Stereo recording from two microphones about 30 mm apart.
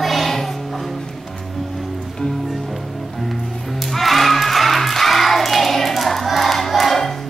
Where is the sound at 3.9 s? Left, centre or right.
Centre.